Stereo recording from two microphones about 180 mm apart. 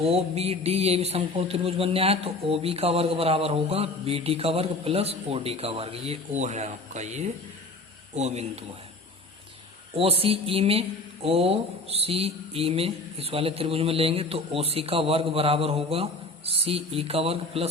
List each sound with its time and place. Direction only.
0.0 s speech: 35° right (ahead or behind)
9.9 s speech: 30° right (ahead or behind)